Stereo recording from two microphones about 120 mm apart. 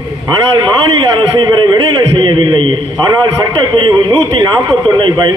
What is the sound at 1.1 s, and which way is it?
A man's voice, 35° right (ahead or behind).